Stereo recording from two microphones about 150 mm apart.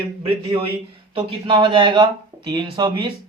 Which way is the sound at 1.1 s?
35° right (ahead or behind).